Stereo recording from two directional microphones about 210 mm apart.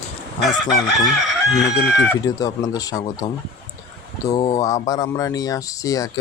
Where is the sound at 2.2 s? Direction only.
15° left (ahead or behind).